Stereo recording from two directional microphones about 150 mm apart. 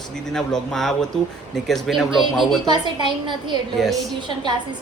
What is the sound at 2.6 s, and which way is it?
Speech, 30° right (ahead or behind).